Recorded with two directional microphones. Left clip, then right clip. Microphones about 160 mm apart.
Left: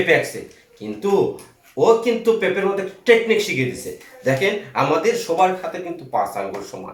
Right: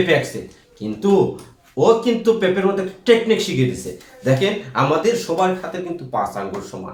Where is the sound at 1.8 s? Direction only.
20° right (ahead or behind).